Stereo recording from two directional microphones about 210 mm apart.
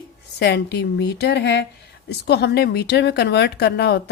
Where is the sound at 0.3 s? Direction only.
50° left (ahead or behind).